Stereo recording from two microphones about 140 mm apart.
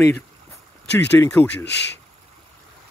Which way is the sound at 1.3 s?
15° left (ahead or behind).